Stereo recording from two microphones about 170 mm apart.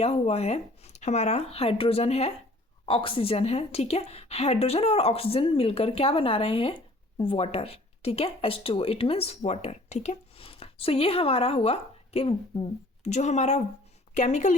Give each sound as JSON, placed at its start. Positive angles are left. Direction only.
{"t": 0.0, "sound": "a woman's voice", "side_deg": 40}